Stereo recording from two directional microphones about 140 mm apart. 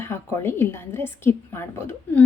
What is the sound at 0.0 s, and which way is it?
A woman's voice, 15° left (ahead or behind).